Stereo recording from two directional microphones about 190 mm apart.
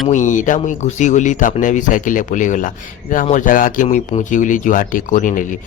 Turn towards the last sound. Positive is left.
turn(degrees=45)  # may be behind; listen again after turning